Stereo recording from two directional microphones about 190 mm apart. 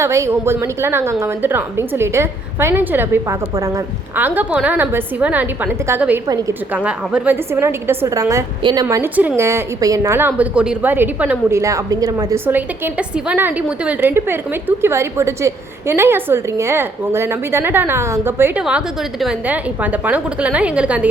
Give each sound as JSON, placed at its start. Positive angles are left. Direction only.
{"t": 0.0, "sound": "a woman's voice", "side_deg": -15}
{"t": 6.2, "sound": "a woman's voice", "side_deg": -20}
{"t": 6.7, "sound": "a woman's voice", "side_deg": -5}